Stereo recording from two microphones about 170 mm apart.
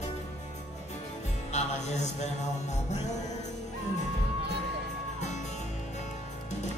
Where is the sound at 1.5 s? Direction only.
40° left (ahead or behind).